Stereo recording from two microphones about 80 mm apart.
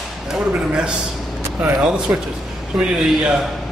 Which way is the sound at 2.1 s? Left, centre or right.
Right.